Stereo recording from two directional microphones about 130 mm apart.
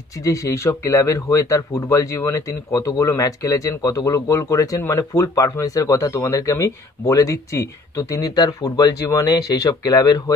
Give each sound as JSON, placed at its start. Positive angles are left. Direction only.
{"t": 0.2, "sound": "speech", "side_deg": 25}